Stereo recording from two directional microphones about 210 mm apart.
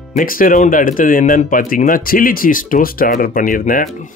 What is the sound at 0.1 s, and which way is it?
Speech, 40° left (ahead or behind).